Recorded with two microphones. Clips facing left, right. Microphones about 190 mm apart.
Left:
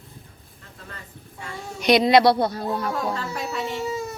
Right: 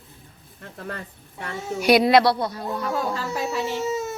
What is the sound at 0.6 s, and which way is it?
A woman's voice, 60° right (ahead or behind).